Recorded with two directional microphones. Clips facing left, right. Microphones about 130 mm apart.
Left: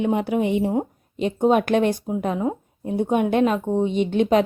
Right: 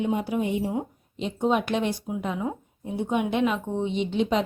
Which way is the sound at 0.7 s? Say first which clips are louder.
Left 6 dB; 50° left (ahead or behind).